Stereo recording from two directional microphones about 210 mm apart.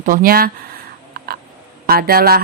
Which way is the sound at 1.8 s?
45° right (ahead or behind).